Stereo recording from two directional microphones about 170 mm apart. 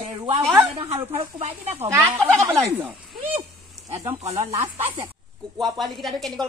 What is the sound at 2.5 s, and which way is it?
Speech, 10° right (ahead or behind).